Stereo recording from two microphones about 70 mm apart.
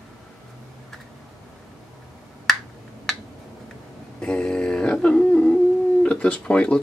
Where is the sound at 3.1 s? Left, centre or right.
Centre.